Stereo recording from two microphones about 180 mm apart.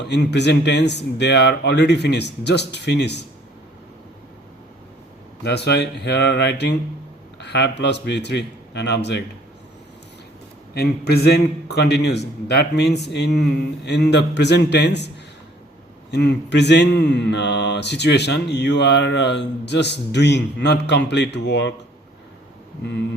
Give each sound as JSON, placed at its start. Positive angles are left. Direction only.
{"t": 0.0, "sound": "mantra", "side_deg": 70}
{"t": 5.4, "sound": "mantra", "side_deg": 70}
{"t": 10.8, "sound": "a man's voice", "side_deg": 65}
{"t": 12.5, "sound": "mantra", "side_deg": 65}
{"t": 16.1, "sound": "mantra", "side_deg": 70}